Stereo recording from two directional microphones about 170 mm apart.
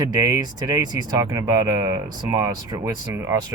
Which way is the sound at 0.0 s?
20° right (ahead or behind).